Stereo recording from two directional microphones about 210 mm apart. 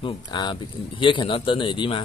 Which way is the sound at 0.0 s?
20° left (ahead or behind).